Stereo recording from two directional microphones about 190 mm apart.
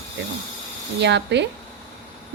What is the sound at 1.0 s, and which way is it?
Speech, 65° right (ahead or behind).